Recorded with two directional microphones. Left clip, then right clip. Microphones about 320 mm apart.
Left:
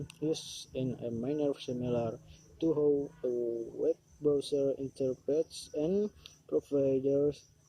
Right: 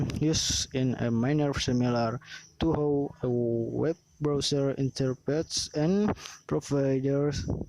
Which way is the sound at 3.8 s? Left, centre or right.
Right.